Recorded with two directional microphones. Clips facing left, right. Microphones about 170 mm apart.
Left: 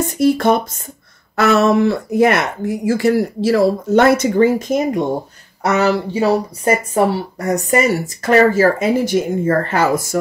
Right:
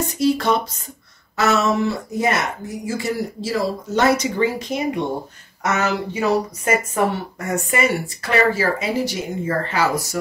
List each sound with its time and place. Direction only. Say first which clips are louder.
0.0 s speech: left 5 dB; 55° left (ahead or behind)
5.6 s speech: left 6 dB; 35° left (ahead or behind); by 10.0 s 50° left (ahead or behind)